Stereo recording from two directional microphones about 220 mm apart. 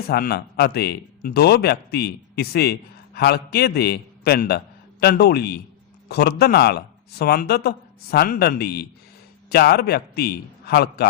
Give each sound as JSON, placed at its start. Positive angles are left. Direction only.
{"t": 0.1, "sound": "a man's voice", "side_deg": 45}